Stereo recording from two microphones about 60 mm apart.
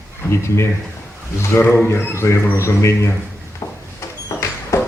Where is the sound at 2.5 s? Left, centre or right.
Left.